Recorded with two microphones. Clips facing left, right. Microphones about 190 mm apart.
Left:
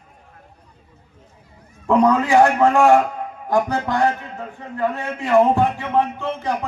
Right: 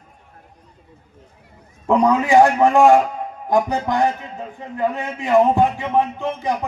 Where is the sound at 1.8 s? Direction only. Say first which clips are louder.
Even; 15° right (ahead or behind).